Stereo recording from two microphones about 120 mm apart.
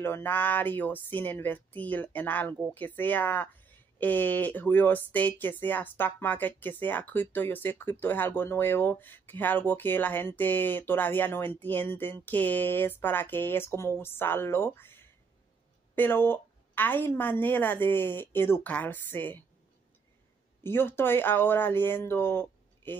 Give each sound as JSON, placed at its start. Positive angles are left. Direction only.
{"t": 0.0, "sound": "speech", "side_deg": 15}
{"t": 20.6, "sound": "speech", "side_deg": 20}